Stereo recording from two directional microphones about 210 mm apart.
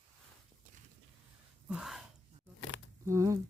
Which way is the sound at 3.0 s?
15° right (ahead or behind).